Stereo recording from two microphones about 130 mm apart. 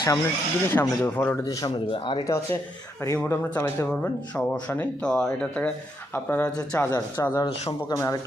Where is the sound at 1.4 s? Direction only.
30° left (ahead or behind).